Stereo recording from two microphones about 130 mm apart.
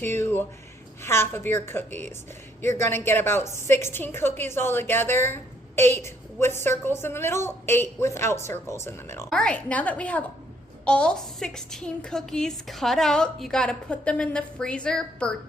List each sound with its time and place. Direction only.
0.0 s a woman's voice: 15° left (ahead or behind)
9.3 s a woman's voice: 10° left (ahead or behind)